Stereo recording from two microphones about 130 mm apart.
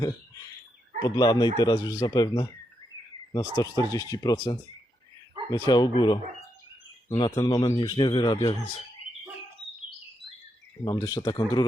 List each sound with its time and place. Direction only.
1.0 s speech: 30° left (ahead or behind)
10.8 s speech: 30° left (ahead or behind)